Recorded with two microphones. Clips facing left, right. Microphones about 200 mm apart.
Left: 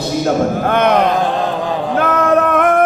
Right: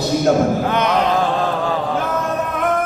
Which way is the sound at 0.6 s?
55° left (ahead or behind).